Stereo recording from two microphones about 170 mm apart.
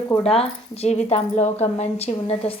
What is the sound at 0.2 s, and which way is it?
A woman's voice, 35° left (ahead or behind).